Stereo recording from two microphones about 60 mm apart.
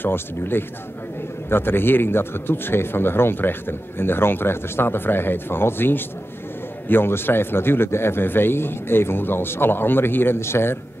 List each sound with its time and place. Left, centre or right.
0.0 s speech: left